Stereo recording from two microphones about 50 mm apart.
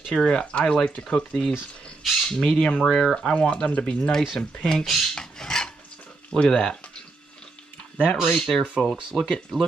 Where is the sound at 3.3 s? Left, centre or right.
Centre.